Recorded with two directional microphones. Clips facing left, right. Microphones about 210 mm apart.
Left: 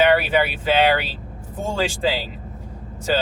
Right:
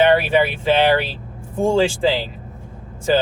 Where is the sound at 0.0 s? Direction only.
25° right (ahead or behind).